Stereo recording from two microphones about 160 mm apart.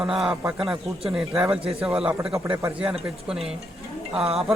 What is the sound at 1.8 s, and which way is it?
A man's voice, 5° right (ahead or behind).